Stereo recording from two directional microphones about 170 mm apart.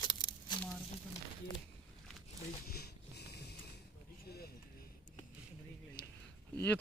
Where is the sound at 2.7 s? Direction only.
70° left (ahead or behind).